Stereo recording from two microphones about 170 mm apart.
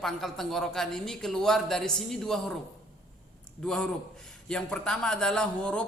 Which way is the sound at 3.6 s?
5° left (ahead or behind).